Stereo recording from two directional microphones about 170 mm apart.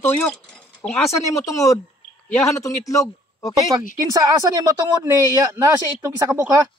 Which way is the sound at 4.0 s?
20° right (ahead or behind).